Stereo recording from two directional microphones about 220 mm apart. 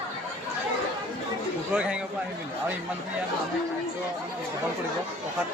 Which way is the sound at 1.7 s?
5° right (ahead or behind).